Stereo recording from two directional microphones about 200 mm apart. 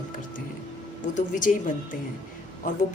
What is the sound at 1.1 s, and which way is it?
Speech, 40° left (ahead or behind).